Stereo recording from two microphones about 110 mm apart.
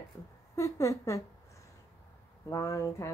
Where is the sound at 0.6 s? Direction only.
30° left (ahead or behind).